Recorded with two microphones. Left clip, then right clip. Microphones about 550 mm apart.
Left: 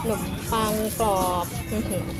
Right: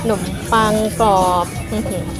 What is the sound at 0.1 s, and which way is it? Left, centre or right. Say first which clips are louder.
Speech: right 12 dB; left.